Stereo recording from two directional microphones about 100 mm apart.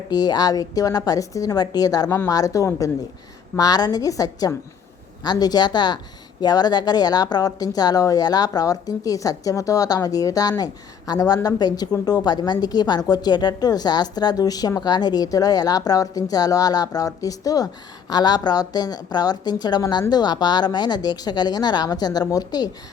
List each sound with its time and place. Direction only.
0.1 s a woman's voice: 40° left (ahead or behind)